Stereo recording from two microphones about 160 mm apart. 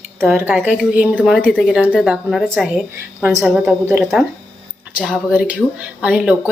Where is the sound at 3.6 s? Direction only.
15° right (ahead or behind).